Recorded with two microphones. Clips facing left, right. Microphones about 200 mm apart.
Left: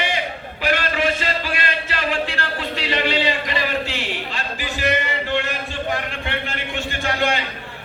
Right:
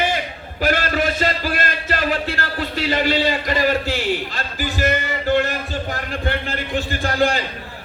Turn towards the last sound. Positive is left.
turn(degrees=-35)  # may be behind; listen again after turning